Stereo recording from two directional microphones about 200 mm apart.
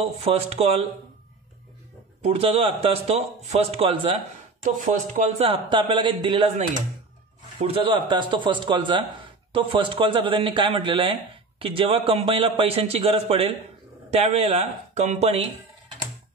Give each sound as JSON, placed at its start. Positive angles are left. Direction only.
{"t": 0.0, "sound": "speech", "side_deg": -30}
{"t": 2.2, "sound": "a man's voice", "side_deg": -30}
{"t": 4.6, "sound": "speech", "side_deg": -40}
{"t": 5.5, "sound": "a man's voice", "side_deg": -25}